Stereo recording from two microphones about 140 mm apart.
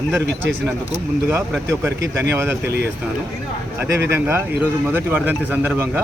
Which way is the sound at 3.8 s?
15° right (ahead or behind).